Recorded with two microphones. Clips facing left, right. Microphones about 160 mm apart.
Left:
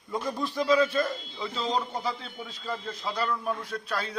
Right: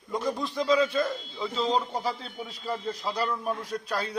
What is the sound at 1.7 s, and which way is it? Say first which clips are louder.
Speech: right 2 dB; 35° right (ahead or behind).